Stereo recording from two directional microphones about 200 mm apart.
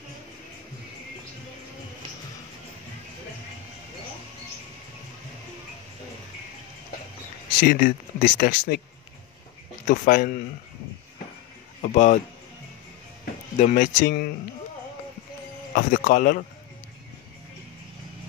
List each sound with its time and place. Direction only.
7.6 s speech: 45° left (ahead or behind)
9.8 s speech: 40° left (ahead or behind)
11.8 s speech: 35° left (ahead or behind)
13.6 s speech: 40° left (ahead or behind)
15.7 s speech: 40° left (ahead or behind)